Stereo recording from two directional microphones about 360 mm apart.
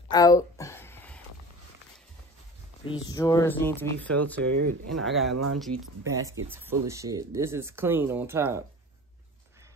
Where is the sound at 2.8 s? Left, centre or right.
Centre.